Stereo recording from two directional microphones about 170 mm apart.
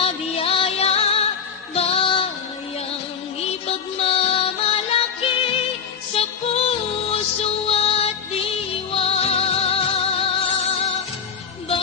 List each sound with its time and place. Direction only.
0.0 s music: 35° left (ahead or behind)
3.3 s music: 35° left (ahead or behind)